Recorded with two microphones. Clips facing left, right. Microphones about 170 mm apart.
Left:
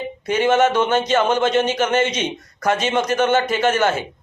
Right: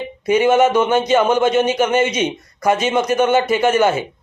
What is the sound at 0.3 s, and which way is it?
A man's voice, 10° right (ahead or behind).